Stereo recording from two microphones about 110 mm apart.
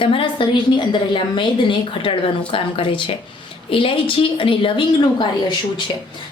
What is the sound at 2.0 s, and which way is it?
A woman's voice, 50° left (ahead or behind).